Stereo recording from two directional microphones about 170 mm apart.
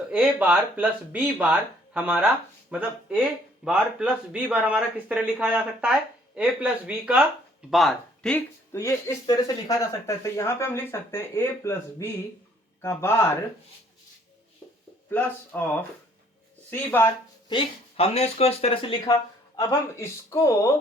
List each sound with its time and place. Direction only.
0.1 s speech: 10° right (ahead or behind); by 13.2 s 15° left (ahead or behind)
15.1 s speech: 10° left (ahead or behind)
17.5 s speech: 35° left (ahead or behind)
19.5 s speech: 20° left (ahead or behind)